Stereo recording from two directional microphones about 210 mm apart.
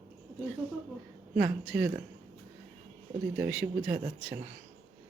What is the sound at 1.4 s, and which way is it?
Speech, 5° right (ahead or behind).